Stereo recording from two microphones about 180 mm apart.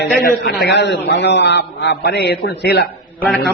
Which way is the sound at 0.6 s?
75° left (ahead or behind).